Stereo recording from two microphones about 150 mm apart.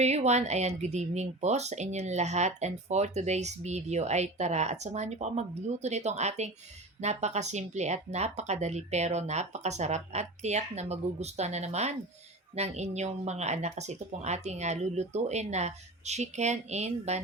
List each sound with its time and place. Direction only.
0.0 s speech: 45° right (ahead or behind)